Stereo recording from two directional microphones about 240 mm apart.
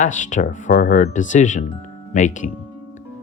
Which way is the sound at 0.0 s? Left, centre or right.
Left.